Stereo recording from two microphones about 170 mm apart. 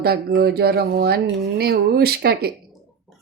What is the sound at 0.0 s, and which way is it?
Speech, 65° right (ahead or behind).